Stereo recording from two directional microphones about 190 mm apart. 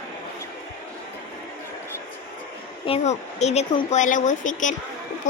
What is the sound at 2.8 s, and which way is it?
A woman's voice, 35° left (ahead or behind).